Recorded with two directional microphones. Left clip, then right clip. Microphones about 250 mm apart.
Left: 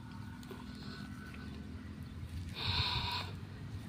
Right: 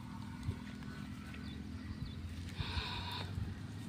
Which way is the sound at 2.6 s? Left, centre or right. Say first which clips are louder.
Left 7 dB; left.